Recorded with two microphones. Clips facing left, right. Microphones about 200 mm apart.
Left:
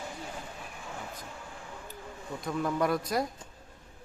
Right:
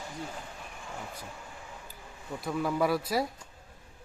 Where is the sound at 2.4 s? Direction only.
5° right (ahead or behind).